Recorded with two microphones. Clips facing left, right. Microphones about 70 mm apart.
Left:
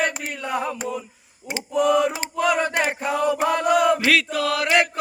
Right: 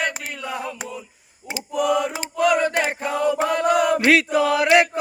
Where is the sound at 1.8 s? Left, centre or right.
Centre.